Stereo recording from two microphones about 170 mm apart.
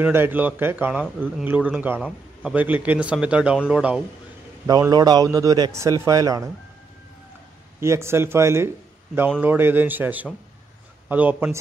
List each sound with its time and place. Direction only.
0.0 s speech: 10° right (ahead or behind)
4.6 s a man's voice: 25° right (ahead or behind)
7.8 s a man's voice: 15° right (ahead or behind)